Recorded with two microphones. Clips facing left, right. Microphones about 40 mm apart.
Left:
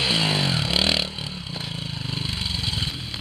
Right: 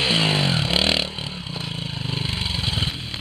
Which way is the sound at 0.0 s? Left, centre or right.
Centre.